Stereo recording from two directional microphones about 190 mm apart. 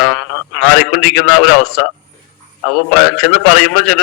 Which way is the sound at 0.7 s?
50° left (ahead or behind).